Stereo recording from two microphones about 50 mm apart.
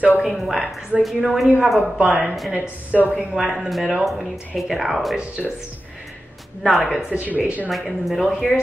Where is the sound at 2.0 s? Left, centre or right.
Right.